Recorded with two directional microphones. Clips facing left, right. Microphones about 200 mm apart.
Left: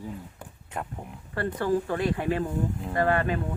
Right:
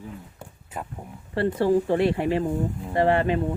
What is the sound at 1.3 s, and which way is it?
Speech, 25° right (ahead or behind).